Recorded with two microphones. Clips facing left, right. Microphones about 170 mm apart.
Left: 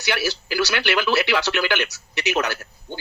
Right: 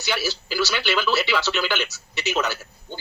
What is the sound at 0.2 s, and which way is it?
Speech, 15° left (ahead or behind).